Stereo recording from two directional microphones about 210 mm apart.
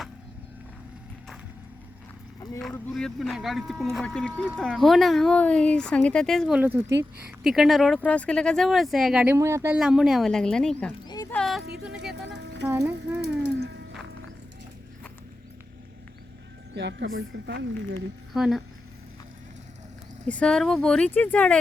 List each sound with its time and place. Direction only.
2.4 s vehicle: 15° left (ahead or behind)
2.7 s speech: 5° left (ahead or behind); by 9.7 s 15° right (ahead or behind)
9.7 s speech: 5° right (ahead or behind)
11.3 s music: centre (ahead or behind)
12.4 s a sound: 55° right (ahead or behind)
12.6 s music: 15° right (ahead or behind)
13.1 s music: 55° right (ahead or behind)
16.7 s speech: 55° right (ahead or behind)
18.3 s speech: centre (ahead or behind)
20.2 s speech: 5° left (ahead or behind)